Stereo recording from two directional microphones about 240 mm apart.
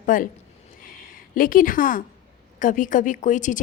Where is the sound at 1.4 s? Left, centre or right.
Left.